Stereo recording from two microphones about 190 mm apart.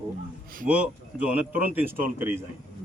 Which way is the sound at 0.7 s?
5° right (ahead or behind).